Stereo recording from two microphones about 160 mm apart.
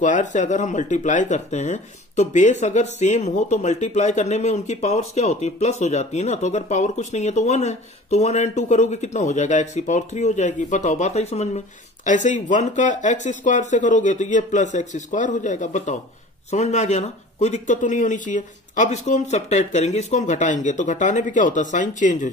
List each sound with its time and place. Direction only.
0.0 s speech: 50° left (ahead or behind)